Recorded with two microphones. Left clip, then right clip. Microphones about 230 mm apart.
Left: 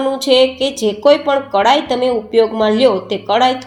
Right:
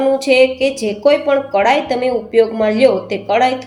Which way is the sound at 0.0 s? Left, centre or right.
Left.